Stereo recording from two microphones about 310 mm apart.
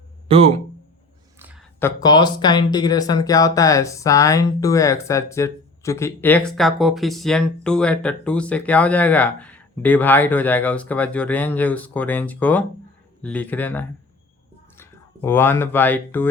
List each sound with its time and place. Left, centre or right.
0.3 s speech: centre
1.4 s a sound: centre
1.8 s speech: centre